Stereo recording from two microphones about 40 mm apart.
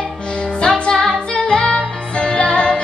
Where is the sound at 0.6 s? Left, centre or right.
Centre.